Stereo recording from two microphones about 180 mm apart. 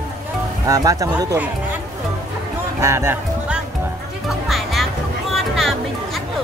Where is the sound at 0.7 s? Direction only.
20° right (ahead or behind).